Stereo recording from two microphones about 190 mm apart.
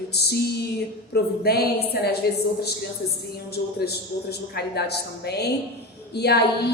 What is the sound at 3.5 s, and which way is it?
A man's voice, 55° left (ahead or behind).